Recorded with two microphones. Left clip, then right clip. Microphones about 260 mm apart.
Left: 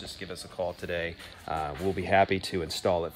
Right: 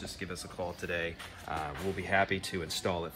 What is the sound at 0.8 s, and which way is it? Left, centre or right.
Speech, left.